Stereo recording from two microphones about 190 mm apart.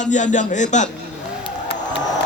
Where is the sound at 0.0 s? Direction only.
40° left (ahead or behind).